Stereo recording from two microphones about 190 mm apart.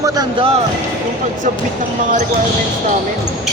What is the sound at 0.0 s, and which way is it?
Speech, 25° right (ahead or behind).